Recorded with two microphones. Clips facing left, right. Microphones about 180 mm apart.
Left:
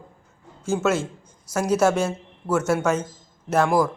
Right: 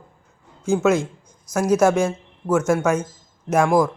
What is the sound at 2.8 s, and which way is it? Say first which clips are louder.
Speech: right 2 dB; 10° right (ahead or behind).